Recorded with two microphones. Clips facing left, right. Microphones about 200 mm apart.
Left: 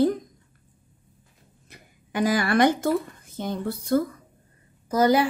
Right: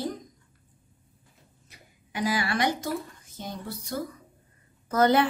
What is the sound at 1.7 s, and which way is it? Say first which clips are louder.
Speech: left 8 dB; 50° left (ahead or behind).